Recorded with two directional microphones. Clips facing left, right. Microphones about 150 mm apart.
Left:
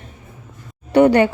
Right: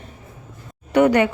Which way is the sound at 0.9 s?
30° left (ahead or behind).